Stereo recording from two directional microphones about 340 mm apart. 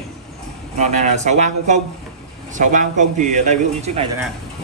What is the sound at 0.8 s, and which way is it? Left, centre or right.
A man's voice, centre.